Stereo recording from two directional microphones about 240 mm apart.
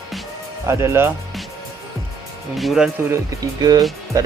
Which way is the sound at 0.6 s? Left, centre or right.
Centre.